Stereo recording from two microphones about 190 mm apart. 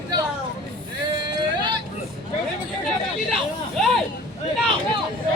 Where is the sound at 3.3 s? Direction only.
Centre (ahead or behind).